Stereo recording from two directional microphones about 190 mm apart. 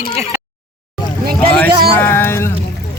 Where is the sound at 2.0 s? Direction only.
10° left (ahead or behind).